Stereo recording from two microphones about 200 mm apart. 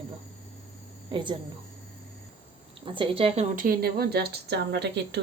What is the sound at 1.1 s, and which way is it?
Speech, 25° right (ahead or behind).